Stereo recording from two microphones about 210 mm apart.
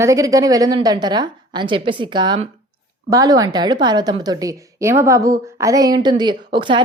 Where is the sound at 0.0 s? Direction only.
15° right (ahead or behind).